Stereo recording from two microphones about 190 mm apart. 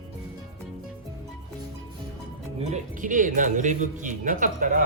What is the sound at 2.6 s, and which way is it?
Speech, 40° right (ahead or behind).